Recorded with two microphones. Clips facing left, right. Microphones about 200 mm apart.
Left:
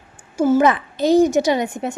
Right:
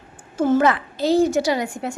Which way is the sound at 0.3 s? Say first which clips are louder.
Left 2 dB; 10° left (ahead or behind).